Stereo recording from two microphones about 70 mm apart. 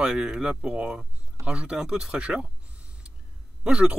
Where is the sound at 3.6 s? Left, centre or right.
Centre.